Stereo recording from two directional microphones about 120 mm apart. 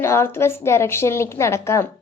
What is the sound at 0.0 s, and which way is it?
Speech, 20° left (ahead or behind).